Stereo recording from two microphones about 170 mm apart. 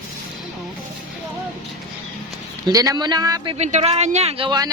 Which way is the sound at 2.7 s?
20° right (ahead or behind).